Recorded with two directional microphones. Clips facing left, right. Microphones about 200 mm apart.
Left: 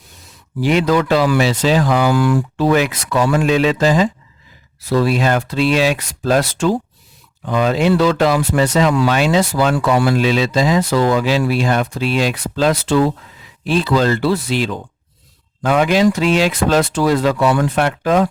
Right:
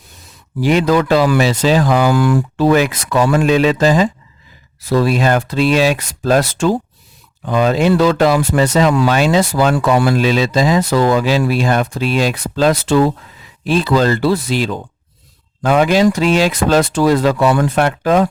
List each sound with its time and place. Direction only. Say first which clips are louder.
0.6 s speech: right 2 dB; 40° right (ahead or behind)